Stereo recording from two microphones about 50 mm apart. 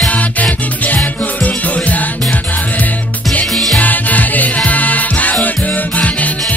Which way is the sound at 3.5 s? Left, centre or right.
Centre.